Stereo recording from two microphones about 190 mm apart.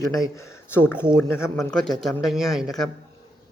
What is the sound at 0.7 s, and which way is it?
A man's voice, 5° right (ahead or behind).